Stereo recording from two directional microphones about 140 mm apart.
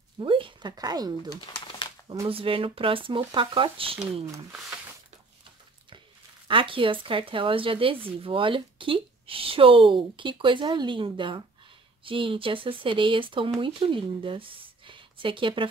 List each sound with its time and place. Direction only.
0.2 s a woman's voice: 35° right (ahead or behind)
1.3 s pigeon: 30° left (ahead or behind)
2.2 s a woman's voice: 40° right (ahead or behind)
6.4 s a woman's voice: 40° right (ahead or behind)